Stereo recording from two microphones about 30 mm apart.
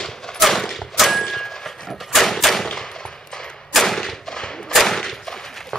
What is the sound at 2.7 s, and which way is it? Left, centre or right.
Gunshot, centre.